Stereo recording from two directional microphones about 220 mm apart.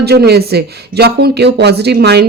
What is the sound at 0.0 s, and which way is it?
Speech, 45° right (ahead or behind).